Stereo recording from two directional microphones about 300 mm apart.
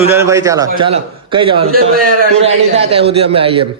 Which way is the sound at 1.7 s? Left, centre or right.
Right.